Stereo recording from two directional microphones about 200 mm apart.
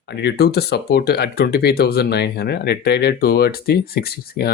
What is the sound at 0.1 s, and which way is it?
Speech, 55° left (ahead or behind).